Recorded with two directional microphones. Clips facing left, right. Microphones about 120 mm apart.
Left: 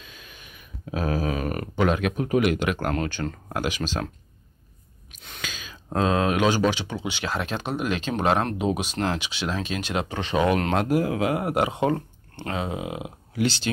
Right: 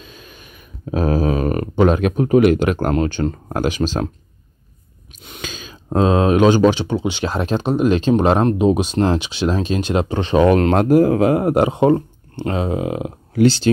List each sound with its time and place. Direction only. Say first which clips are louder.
0.0 s a sound: right 6 dB; 35° right (ahead or behind)
3.0 s speech: right 9 dB; 30° right (ahead or behind)
3.4 s speech: right 6 dB; 40° right (ahead or behind)
5.4 s speech: right 5 dB; 30° right (ahead or behind)